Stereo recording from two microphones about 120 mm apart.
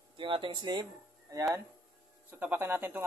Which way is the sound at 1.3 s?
25° right (ahead or behind).